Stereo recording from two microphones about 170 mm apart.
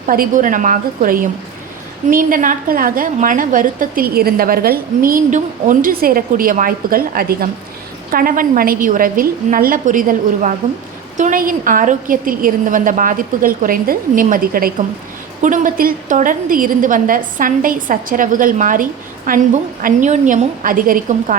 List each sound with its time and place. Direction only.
0.0 s a woman's voice: 50° right (ahead or behind)